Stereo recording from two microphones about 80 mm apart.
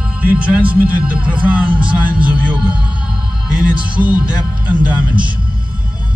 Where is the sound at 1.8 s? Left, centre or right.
Centre.